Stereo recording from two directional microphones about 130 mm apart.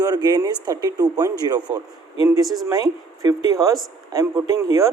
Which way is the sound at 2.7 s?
30° right (ahead or behind).